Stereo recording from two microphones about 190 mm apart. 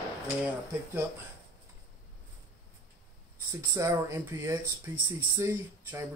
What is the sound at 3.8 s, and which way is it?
Speech, 15° right (ahead or behind).